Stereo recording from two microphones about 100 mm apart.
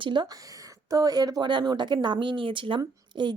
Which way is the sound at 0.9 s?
40° right (ahead or behind).